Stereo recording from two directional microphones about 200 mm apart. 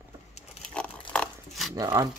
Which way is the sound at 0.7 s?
5° left (ahead or behind).